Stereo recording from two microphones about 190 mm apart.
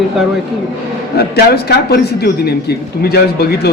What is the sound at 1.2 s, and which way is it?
A man's voice, 55° left (ahead or behind).